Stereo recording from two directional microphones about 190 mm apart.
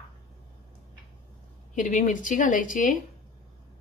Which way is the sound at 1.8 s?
40° left (ahead or behind).